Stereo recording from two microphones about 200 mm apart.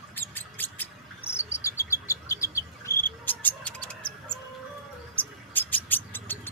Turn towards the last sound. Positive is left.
turn(degrees=10)  # may be behind; listen again after turning